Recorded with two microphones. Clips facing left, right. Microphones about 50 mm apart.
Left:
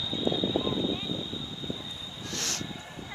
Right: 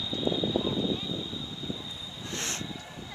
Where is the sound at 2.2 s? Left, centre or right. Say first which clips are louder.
Even; right.